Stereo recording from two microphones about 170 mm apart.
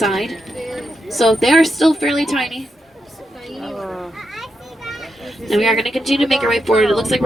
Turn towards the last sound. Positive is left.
turn(degrees=0)  # may be behind; listen again after turning